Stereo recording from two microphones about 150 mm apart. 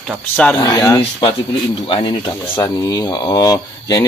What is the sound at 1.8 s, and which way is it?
Speech, 35° left (ahead or behind).